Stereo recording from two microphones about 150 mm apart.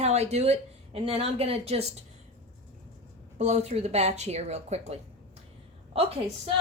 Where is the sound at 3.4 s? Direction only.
50° right (ahead or behind).